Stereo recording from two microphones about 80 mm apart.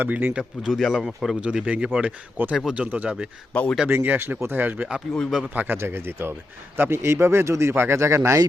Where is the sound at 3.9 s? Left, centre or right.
Right.